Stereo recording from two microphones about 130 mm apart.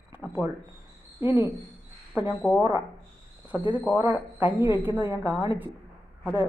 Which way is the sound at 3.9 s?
10° right (ahead or behind).